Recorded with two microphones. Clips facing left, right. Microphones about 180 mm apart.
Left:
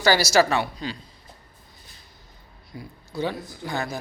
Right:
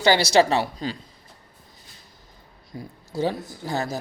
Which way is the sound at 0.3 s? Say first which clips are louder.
Right 2 dB; 35° right (ahead or behind).